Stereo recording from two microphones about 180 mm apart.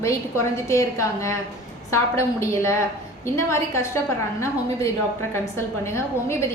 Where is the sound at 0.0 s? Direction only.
15° left (ahead or behind).